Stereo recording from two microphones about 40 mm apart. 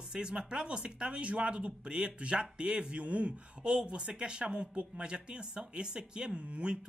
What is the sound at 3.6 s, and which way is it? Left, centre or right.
Speech, right.